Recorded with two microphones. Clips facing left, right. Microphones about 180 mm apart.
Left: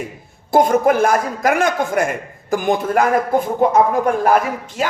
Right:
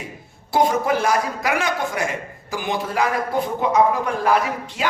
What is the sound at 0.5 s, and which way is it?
A woman's voice, 50° left (ahead or behind).